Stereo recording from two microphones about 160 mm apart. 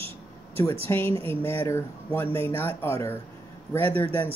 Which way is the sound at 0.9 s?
15° left (ahead or behind).